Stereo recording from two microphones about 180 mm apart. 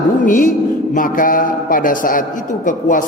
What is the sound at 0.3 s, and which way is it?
A man's voice, 50° left (ahead or behind).